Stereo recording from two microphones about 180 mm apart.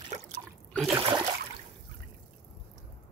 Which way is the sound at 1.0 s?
25° right (ahead or behind).